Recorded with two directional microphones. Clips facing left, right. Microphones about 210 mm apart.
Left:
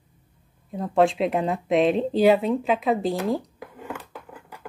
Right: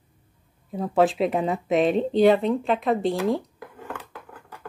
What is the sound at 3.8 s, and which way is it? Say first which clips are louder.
Dishes: left 1 dB; 10° left (ahead or behind).